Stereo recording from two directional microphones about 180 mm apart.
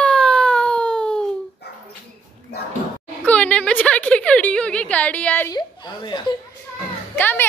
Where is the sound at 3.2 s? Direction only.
5° left (ahead or behind).